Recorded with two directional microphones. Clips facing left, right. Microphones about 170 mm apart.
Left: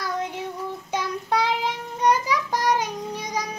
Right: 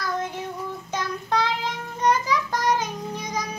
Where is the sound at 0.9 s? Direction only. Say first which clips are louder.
Left 1 dB; 10° left (ahead or behind).